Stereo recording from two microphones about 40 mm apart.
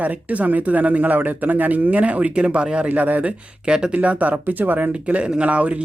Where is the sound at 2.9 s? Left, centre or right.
Right.